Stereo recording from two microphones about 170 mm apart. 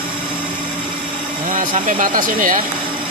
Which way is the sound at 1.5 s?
50° right (ahead or behind).